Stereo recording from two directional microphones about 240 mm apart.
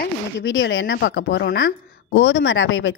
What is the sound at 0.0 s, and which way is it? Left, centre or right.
A woman's voice, left.